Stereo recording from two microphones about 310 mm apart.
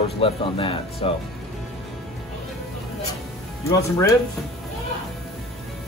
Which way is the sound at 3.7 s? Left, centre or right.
Centre.